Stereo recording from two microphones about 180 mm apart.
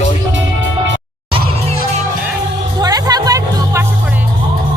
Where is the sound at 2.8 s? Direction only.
20° right (ahead or behind).